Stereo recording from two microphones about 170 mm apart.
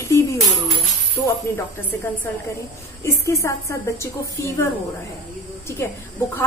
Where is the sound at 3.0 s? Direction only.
15° left (ahead or behind).